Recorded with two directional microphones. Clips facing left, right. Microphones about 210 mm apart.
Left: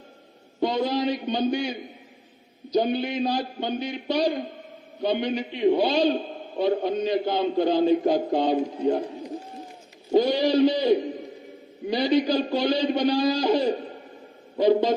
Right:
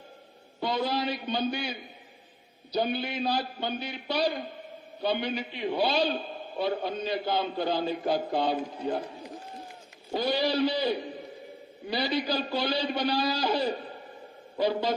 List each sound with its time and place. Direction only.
0.6 s a man's voice: 15° left (ahead or behind)
2.7 s a man's voice: 20° left (ahead or behind)
10.1 s a man's voice: 15° left (ahead or behind)